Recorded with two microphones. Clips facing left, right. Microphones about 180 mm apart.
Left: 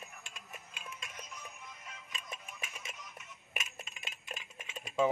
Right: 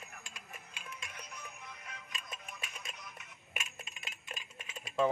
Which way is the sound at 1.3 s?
65° right (ahead or behind).